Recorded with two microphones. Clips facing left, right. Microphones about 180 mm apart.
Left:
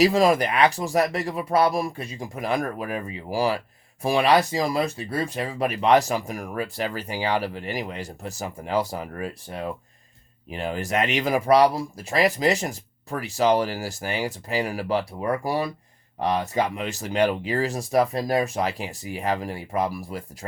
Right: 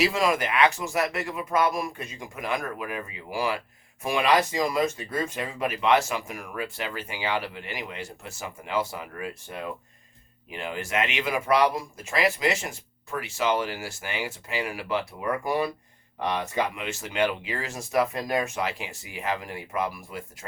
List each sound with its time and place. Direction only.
0.0 s speech: 35° left (ahead or behind)